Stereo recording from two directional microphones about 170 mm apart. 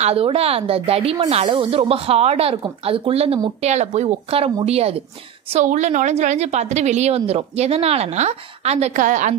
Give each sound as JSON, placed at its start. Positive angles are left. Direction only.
{"t": 0.0, "sound": "a woman's voice", "side_deg": -35}